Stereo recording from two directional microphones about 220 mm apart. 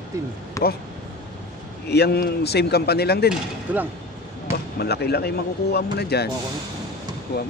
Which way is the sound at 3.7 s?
5° right (ahead or behind).